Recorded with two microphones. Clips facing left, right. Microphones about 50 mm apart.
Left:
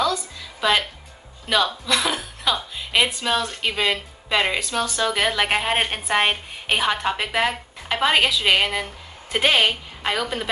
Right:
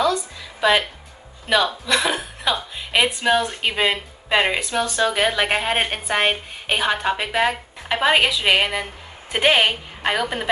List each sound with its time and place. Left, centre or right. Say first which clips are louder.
0.6 s a woman's voice: right 3 dB; centre
3.1 s a woman's voice: right 4 dB; right